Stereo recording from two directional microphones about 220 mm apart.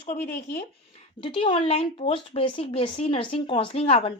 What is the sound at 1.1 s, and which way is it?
Speech, 25° left (ahead or behind).